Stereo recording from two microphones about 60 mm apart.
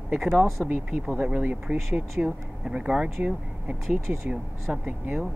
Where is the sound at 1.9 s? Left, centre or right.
Centre.